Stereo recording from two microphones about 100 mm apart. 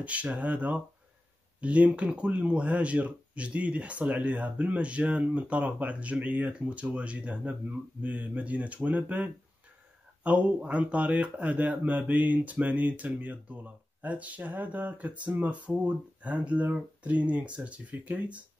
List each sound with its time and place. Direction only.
0.0 s speech: 15° right (ahead or behind)